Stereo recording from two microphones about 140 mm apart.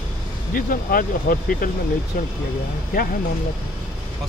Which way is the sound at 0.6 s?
90° left.